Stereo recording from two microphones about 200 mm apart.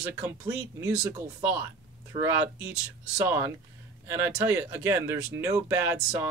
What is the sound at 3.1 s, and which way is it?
Speech, 15° right (ahead or behind).